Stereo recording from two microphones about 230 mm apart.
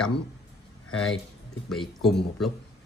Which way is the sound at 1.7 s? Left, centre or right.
Centre.